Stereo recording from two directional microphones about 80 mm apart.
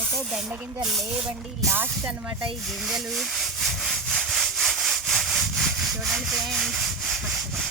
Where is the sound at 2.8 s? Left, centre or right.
Centre.